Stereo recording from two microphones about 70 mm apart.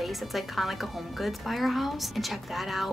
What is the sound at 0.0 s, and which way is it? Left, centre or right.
A woman's voice, centre.